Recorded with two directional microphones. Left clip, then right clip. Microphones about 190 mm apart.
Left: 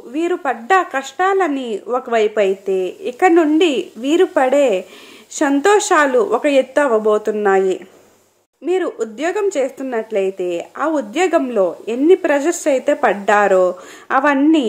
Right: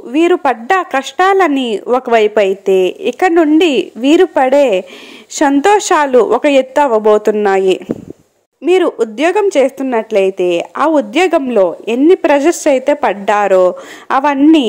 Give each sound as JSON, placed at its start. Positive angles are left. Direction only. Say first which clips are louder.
{"t": 0.1, "sound": "a woman's voice", "louder": "right 8 dB", "side_deg": -35}